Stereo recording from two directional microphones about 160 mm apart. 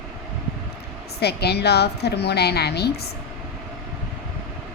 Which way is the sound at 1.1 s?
90° left.